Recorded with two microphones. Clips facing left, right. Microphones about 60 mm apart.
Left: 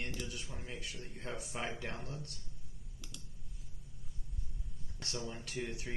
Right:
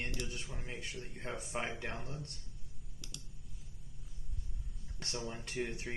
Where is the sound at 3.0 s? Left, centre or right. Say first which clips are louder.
Right 1 dB; centre.